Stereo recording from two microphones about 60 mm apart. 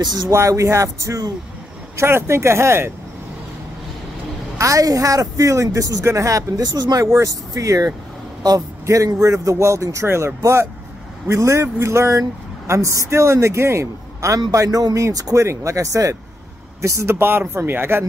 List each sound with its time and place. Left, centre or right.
0.3 s speech: right
2.0 s speech: right
4.6 s speech: right
7.1 s speech: right
8.4 s speech: right
8.8 s speech: right
10.0 s speech: right
15.1 s speech: right
15.4 s speech: right
16.8 s speech: right